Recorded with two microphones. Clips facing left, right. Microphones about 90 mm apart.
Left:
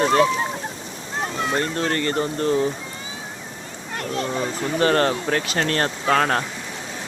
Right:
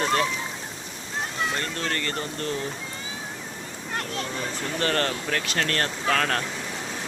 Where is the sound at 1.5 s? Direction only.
30° left (ahead or behind).